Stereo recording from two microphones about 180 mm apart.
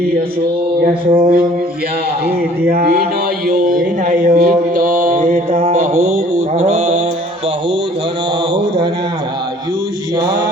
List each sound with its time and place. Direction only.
0.9 s a sound: 40° right (ahead or behind)
2.2 s speech: 60° right (ahead or behind)
4.2 s mantra: 50° right (ahead or behind)